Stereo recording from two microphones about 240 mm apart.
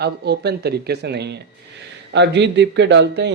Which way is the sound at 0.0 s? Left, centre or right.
Right.